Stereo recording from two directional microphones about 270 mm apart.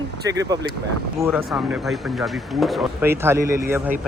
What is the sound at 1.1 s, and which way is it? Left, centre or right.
Speech, centre.